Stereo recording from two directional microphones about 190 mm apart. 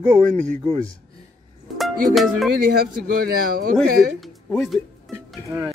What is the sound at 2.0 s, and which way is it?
Speech, centre (ahead or behind).